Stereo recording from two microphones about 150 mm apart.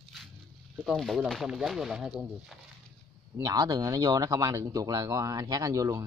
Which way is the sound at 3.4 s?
25° right (ahead or behind).